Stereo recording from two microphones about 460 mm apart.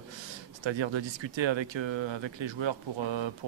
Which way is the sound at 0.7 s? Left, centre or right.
Right.